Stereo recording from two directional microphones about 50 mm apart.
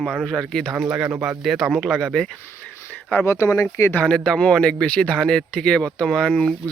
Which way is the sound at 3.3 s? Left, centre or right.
Left.